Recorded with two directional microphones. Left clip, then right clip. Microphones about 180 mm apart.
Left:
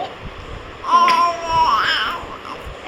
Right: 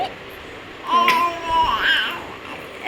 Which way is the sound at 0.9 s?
20° left (ahead or behind).